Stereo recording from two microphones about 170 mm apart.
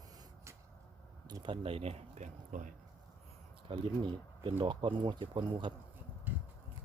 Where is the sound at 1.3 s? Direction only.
30° right (ahead or behind); by 2.7 s 50° right (ahead or behind).